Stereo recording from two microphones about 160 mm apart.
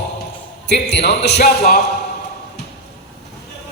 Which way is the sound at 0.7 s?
90° left.